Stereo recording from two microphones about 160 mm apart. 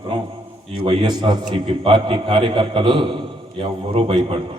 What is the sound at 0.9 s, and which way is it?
A man's voice, 30° right (ahead or behind).